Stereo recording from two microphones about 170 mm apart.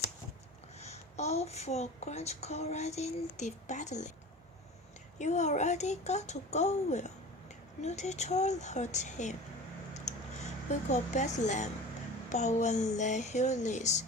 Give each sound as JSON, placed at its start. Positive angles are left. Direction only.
{"t": 0.8, "sound": "a child's voice", "side_deg": 40}
{"t": 5.2, "sound": "a child's voice", "side_deg": 45}
{"t": 10.7, "sound": "speech", "side_deg": 40}